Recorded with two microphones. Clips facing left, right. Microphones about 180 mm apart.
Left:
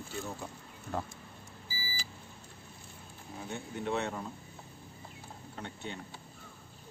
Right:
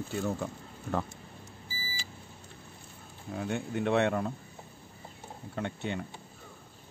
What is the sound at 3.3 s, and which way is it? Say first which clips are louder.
Speech: right 8 dB; 75° right (ahead or behind).